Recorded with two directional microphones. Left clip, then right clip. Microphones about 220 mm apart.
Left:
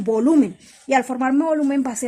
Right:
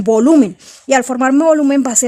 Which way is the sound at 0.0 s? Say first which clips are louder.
Right 7 dB; 45° right (ahead or behind).